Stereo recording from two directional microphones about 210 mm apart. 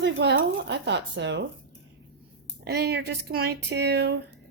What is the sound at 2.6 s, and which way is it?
Speech, 50° right (ahead or behind).